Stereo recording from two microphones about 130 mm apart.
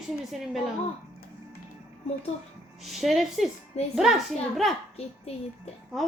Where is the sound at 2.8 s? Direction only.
Centre (ahead or behind).